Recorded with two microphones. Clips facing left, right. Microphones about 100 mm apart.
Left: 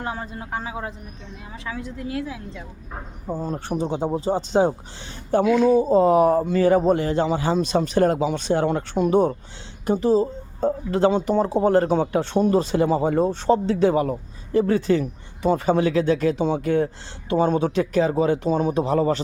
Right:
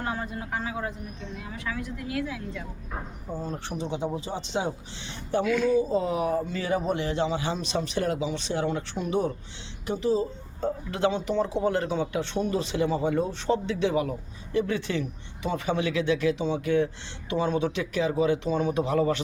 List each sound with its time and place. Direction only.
0.0 s speech: 25° left (ahead or behind)
3.4 s speech: 45° left (ahead or behind)
5.5 s speech: 25° left (ahead or behind)
5.7 s speech: 45° left (ahead or behind)